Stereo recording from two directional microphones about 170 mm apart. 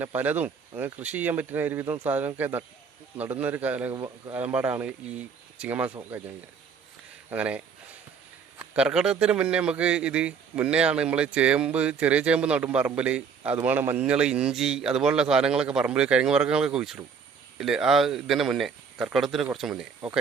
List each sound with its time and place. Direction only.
0.0 s a man's voice: 10° right (ahead or behind)
3.9 s speech: 25° right (ahead or behind)
4.4 s a man's voice: 10° right (ahead or behind)
7.3 s a man's voice: 10° right (ahead or behind)